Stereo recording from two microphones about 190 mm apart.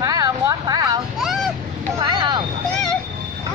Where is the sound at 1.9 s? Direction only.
25° right (ahead or behind).